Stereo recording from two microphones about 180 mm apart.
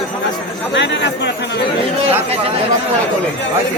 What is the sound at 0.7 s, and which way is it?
Speech, 80° left.